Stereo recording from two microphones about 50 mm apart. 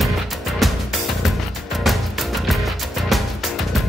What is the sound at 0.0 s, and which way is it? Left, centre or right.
Music, centre.